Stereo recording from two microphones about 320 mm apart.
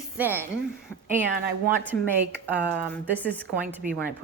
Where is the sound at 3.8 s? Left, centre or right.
Right.